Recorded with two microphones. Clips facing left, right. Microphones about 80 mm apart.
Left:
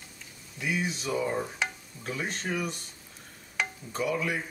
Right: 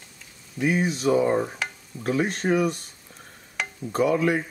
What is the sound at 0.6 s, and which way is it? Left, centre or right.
Speech, right.